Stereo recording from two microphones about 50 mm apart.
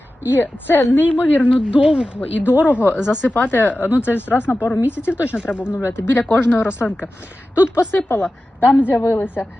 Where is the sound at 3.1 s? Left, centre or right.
Left.